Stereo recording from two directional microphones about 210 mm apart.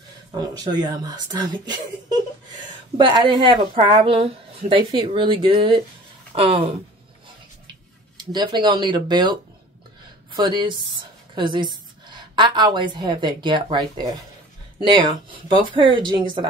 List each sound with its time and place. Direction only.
0.3 s a woman's voice: 20° right (ahead or behind)
3.0 s a woman's voice: 20° right (ahead or behind)
8.2 s a woman's voice: 20° right (ahead or behind)